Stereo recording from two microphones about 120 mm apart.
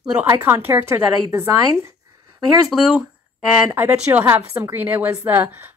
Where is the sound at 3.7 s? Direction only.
15° right (ahead or behind).